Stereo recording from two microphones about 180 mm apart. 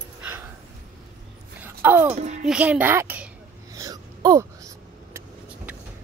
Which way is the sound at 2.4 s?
5° right (ahead or behind).